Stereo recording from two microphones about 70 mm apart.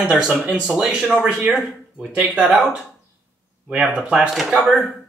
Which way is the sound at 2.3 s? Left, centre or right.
Centre.